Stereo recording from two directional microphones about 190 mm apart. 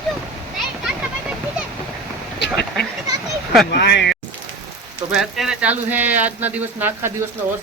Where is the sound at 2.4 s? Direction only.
65° left (ahead or behind).